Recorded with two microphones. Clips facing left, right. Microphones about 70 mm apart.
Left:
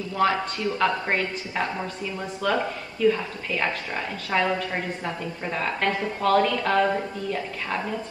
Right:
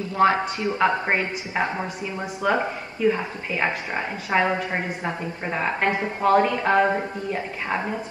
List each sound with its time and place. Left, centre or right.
0.1 s a woman's voice: right